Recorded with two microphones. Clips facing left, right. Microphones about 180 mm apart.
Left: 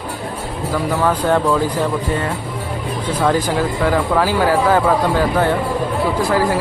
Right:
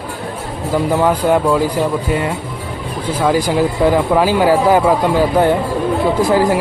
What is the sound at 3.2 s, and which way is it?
Speech, 10° right (ahead or behind).